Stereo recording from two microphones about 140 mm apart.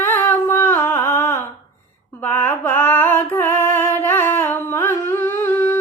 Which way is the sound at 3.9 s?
15° left (ahead or behind).